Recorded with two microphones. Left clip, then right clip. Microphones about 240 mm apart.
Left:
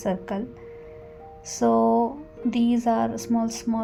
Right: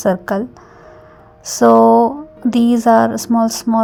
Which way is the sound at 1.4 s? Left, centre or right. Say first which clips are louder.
Right 12 dB; right.